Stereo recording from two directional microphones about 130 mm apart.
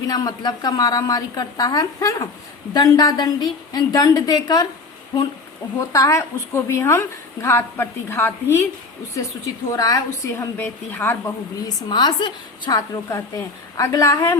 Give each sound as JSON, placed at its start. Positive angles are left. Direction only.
{"t": 0.1, "sound": "a woman's voice", "side_deg": 30}
{"t": 5.9, "sound": "a woman's voice", "side_deg": 25}
{"t": 11.6, "sound": "a woman's voice", "side_deg": 35}
{"t": 13.1, "sound": "a woman's voice", "side_deg": 25}